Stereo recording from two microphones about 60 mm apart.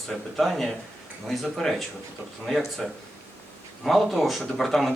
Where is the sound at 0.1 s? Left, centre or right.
Centre.